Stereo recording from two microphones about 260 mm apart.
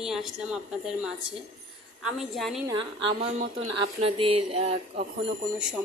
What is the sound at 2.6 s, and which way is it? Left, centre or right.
Speech, centre.